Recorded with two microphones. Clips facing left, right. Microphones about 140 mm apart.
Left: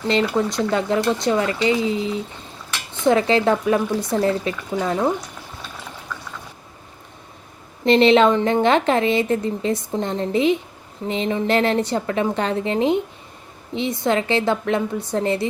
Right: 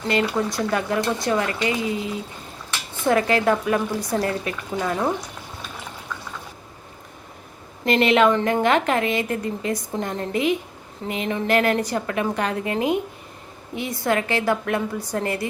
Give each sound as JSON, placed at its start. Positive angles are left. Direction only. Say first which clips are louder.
{"t": 0.5, "sound": "a woman's voice", "louder": "left 3 dB", "side_deg": 25}
{"t": 7.9, "sound": "a woman's voice", "louder": "left 4 dB", "side_deg": 30}
{"t": 8.6, "sound": "a woman's voice", "louder": "left 3 dB", "side_deg": 30}